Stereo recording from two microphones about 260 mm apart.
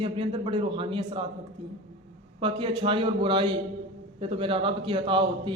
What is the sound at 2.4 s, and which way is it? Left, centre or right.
Mantra, centre.